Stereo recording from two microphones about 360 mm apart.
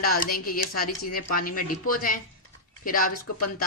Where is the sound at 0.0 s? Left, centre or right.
Left.